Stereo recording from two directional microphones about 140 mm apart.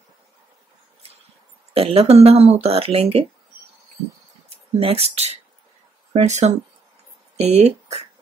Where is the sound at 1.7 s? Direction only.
45° right (ahead or behind).